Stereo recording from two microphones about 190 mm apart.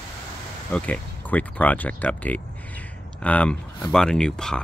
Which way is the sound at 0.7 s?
5° left (ahead or behind).